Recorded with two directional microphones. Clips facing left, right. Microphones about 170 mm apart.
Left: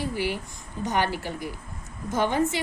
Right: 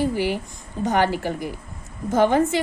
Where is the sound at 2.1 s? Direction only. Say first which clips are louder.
Right 6 dB; 50° right (ahead or behind).